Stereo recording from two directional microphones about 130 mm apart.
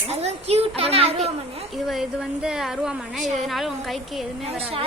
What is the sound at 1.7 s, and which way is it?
A woman's voice, centre (ahead or behind).